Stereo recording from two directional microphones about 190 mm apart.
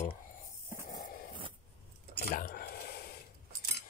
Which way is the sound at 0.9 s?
45° left (ahead or behind).